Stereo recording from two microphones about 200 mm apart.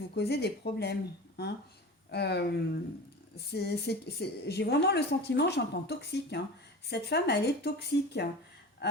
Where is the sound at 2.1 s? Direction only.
55° left (ahead or behind).